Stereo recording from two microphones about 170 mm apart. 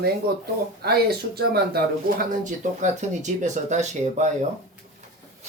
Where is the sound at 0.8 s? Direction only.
65° right (ahead or behind).